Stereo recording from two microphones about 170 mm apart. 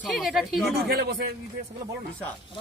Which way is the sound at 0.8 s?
65° right (ahead or behind).